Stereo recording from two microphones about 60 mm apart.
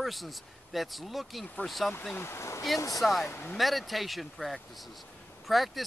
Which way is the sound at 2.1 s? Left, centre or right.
Left.